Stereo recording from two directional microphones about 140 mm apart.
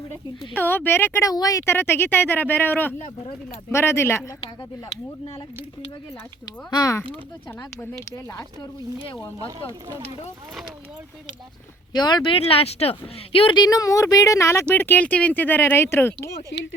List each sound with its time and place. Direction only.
0.1 s speech: 15° left (ahead or behind)
6.7 s speech: 25° left (ahead or behind)
11.9 s speech: 30° left (ahead or behind)